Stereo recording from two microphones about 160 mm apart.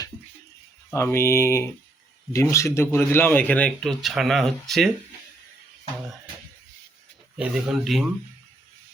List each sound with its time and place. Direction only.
0.9 s speech: 15° left (ahead or behind)
7.3 s speech: 5° right (ahead or behind)